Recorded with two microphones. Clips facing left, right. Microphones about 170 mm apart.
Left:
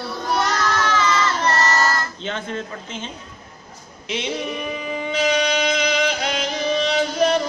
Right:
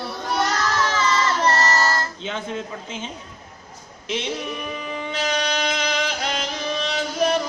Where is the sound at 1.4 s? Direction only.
30° right (ahead or behind).